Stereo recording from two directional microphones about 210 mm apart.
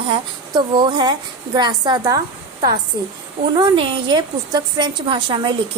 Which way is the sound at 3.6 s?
20° right (ahead or behind).